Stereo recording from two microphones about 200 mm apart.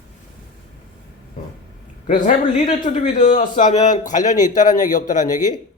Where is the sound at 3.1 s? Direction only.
40° left (ahead or behind).